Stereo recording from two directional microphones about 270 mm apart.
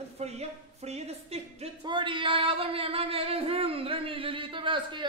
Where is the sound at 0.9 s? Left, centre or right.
Right.